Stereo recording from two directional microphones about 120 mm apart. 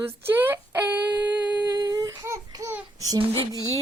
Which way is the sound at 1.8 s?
30° right (ahead or behind).